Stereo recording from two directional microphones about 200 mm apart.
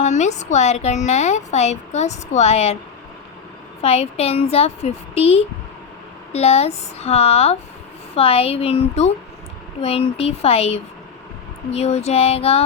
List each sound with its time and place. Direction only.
0.0 s a woman's voice: 35° left (ahead or behind)
3.8 s a woman's voice: 30° left (ahead or behind)